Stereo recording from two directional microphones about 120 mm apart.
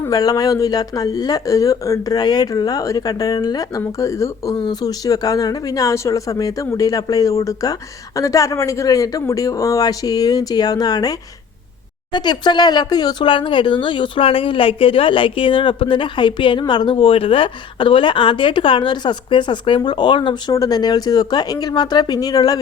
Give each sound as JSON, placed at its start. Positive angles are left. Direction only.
{"t": 0.1, "sound": "speech", "side_deg": 30}
{"t": 20.5, "sound": "speech", "side_deg": 30}